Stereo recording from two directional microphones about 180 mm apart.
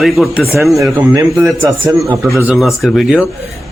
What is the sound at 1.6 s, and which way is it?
Speech, 15° right (ahead or behind).